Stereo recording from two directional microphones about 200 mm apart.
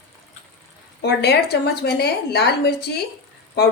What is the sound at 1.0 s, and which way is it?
A woman's voice, 55° left (ahead or behind).